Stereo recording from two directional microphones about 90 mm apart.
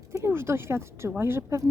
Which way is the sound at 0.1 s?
30° right (ahead or behind).